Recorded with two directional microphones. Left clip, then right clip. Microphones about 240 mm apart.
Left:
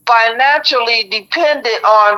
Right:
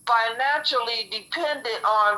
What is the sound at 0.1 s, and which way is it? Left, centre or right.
A woman's voice, left.